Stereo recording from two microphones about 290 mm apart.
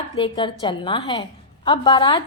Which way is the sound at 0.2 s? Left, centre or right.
Centre.